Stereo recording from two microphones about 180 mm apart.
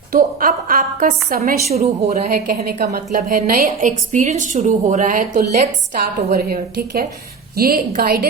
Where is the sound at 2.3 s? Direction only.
55° right (ahead or behind).